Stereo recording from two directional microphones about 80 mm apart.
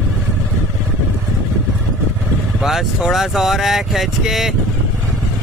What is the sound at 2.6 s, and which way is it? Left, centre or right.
Speech, centre.